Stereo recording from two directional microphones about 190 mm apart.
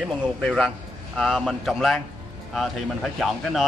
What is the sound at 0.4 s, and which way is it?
A man's voice, centre (ahead or behind).